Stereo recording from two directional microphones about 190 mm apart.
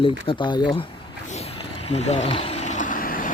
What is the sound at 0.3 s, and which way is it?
Speech, 25° left (ahead or behind).